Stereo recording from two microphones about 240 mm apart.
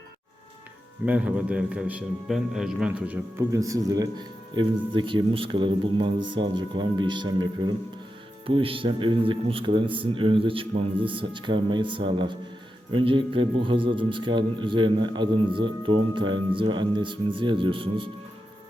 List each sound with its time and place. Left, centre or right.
1.0 s a man's voice: centre; by 18.1 s right